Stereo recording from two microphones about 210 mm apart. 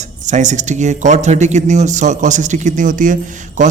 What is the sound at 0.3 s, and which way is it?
Speech, 35° right (ahead or behind).